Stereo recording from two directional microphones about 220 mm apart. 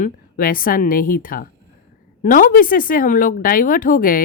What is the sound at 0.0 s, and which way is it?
Speech, 40° left (ahead or behind).